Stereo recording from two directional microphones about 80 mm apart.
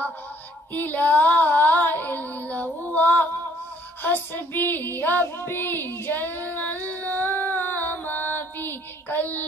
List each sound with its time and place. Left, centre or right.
0.7 s female singing: left
4.0 s child singing: left